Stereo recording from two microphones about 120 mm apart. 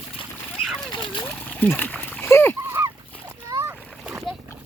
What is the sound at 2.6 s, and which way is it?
Splash, 20° right (ahead or behind).